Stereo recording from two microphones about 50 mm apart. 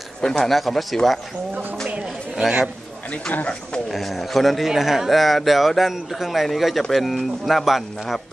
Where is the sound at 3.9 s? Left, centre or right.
Centre.